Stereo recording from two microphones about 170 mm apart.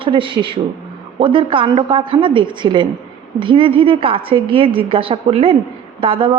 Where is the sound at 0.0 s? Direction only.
30° right (ahead or behind).